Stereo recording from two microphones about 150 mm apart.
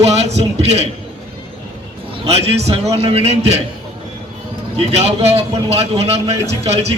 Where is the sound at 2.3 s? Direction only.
45° right (ahead or behind).